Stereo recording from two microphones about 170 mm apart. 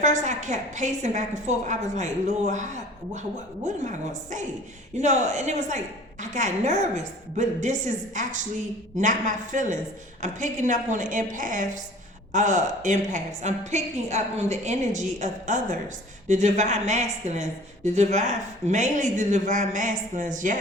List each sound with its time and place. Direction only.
0.0 s a woman's voice: 45° right (ahead or behind)